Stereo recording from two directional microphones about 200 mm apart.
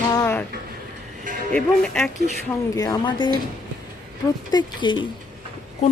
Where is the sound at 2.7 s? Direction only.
20° left (ahead or behind).